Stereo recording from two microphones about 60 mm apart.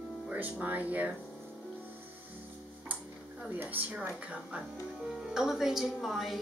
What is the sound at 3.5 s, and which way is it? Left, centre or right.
Speech, right.